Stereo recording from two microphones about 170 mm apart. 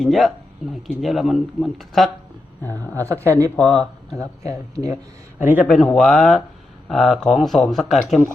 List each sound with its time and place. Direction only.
0.0 s speech: centre (ahead or behind)
2.6 s speech: 10° left (ahead or behind)
3.1 s a man's voice: 15° right (ahead or behind)
5.6 s speech: 5° left (ahead or behind)